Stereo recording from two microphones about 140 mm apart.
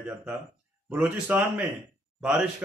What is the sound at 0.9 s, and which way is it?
Speech, 15° right (ahead or behind).